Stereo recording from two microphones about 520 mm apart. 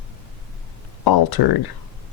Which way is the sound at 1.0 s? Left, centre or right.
Left.